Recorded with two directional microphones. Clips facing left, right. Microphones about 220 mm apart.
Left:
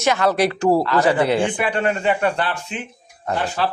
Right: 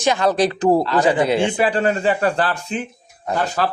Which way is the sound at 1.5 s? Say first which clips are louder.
Right 3 dB; 35° right (ahead or behind).